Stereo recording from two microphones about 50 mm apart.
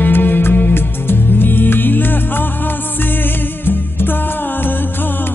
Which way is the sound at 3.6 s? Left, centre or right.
Left.